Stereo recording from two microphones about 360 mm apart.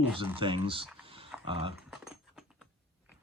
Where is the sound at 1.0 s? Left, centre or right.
Centre.